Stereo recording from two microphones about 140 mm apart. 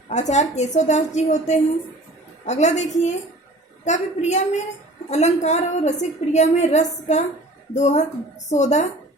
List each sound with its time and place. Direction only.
0.1 s a woman's voice: 55° left (ahead or behind)